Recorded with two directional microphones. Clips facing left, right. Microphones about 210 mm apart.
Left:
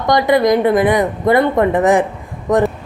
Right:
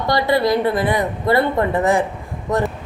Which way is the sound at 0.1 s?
20° left (ahead or behind).